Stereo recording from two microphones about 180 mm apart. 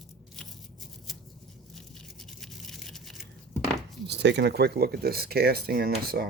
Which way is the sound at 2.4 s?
Centre (ahead or behind).